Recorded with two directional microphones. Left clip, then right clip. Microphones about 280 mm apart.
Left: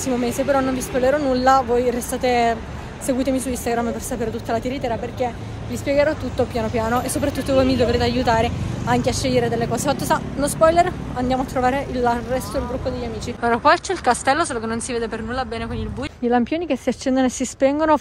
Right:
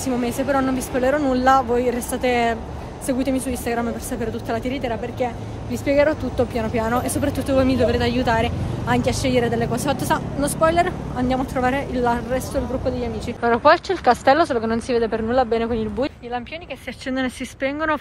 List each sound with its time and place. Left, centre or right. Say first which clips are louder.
0.0 s a woman's voice: left 1 dB; centre
13.4 s speech: right 1 dB; centre
16.3 s speech: left 9 dB; left